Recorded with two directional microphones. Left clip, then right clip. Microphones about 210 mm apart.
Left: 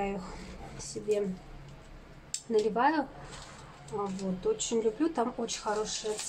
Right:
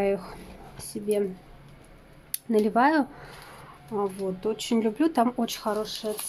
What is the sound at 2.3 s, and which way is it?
Speech, 50° right (ahead or behind).